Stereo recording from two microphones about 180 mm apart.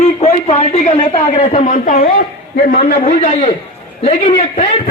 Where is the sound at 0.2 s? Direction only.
35° left (ahead or behind).